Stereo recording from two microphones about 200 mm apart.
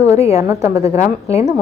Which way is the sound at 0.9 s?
30° left (ahead or behind).